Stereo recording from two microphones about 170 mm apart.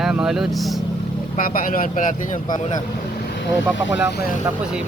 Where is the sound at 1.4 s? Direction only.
55° left (ahead or behind).